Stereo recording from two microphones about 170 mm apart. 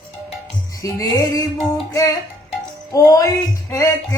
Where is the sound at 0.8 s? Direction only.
20° left (ahead or behind).